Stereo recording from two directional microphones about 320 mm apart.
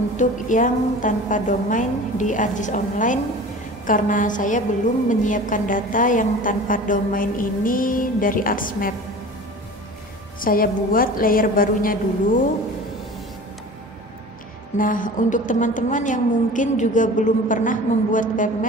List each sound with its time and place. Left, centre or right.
0.2 s a woman's voice: left
10.4 s a woman's voice: left
14.8 s a woman's voice: left